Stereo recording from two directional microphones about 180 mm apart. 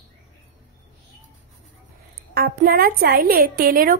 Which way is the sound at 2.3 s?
55° right (ahead or behind).